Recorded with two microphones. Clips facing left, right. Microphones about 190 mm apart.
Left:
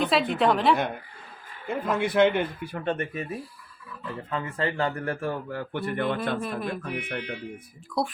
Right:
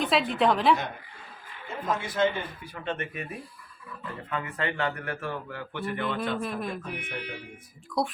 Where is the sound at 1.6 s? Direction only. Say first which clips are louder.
Left 5 dB; 60° left (ahead or behind).